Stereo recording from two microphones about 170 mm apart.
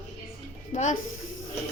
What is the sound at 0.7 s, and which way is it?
Speech, 45° left (ahead or behind).